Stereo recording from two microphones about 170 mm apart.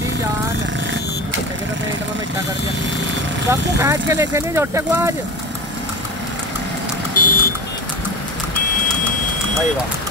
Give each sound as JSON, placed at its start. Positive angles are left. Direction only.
{"t": 3.8, "sound": "speech", "side_deg": -15}
{"t": 7.2, "sound": "vehicle", "side_deg": 55}